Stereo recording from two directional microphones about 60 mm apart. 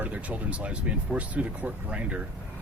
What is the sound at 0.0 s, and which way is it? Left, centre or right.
Speech, right.